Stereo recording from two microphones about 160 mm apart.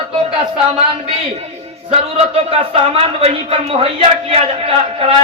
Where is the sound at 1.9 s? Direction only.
40° right (ahead or behind).